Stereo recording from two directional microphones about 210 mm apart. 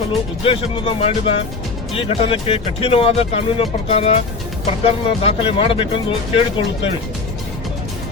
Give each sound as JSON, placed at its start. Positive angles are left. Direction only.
{"t": 0.4, "sound": "speech", "side_deg": 25}